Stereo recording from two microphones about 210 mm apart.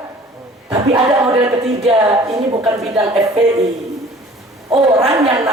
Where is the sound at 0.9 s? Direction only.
25° right (ahead or behind).